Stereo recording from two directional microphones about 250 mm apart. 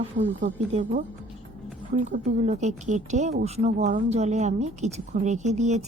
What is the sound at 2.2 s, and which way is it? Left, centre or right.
A woman's voice, right.